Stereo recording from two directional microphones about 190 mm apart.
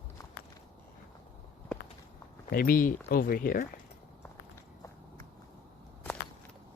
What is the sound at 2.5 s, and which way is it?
Speech, 50° left (ahead or behind).